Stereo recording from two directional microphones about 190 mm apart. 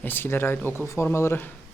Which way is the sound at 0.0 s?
10° left (ahead or behind).